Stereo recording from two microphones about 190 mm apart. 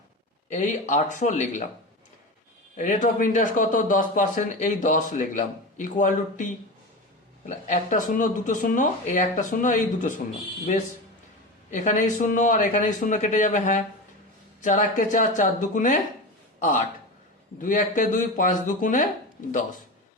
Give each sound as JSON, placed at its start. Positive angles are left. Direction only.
{"t": 0.5, "sound": "speech", "side_deg": 40}
{"t": 2.7, "sound": "speech", "side_deg": 40}
{"t": 11.7, "sound": "speech", "side_deg": 40}